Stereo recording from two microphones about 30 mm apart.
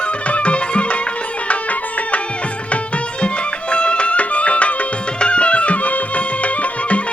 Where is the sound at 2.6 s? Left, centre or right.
Left.